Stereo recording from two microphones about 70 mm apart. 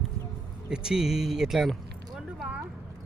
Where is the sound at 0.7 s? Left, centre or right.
Centre.